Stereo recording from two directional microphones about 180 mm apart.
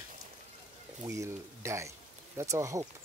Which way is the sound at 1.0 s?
15° right (ahead or behind).